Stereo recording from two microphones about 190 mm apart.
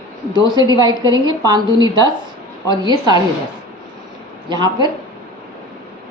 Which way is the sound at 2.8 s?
20° right (ahead or behind).